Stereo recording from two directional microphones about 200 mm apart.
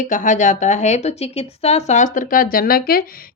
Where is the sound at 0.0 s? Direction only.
40° left (ahead or behind).